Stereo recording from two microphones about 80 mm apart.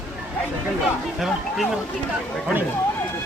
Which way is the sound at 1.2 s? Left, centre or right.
Centre.